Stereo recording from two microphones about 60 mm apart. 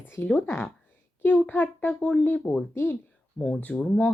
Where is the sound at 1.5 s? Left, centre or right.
Left.